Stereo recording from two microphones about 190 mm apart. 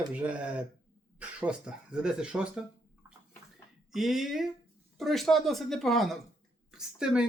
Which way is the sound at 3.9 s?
Centre (ahead or behind).